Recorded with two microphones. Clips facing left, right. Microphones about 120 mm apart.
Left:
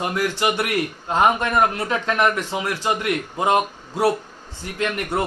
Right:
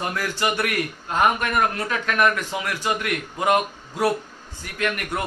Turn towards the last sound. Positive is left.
turn(degrees=25)  # may be behind; listen again after turning